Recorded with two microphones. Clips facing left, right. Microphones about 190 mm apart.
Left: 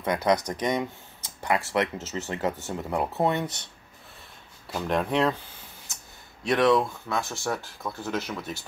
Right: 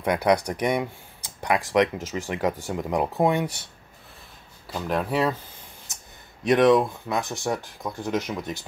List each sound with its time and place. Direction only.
0.0 s speech: 15° right (ahead or behind)
4.6 s speech: centre (ahead or behind)
6.4 s speech: 20° right (ahead or behind)